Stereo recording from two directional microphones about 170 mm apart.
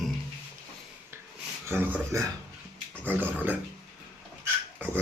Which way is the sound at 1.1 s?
15° right (ahead or behind).